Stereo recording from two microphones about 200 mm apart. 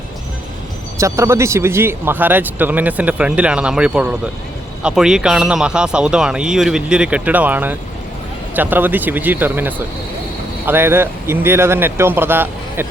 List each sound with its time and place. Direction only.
0.9 s speech: 15° right (ahead or behind)